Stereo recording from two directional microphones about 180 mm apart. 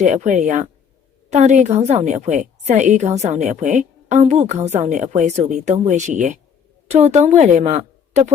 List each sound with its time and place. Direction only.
0.0 s a woman's voice: 45° right (ahead or behind)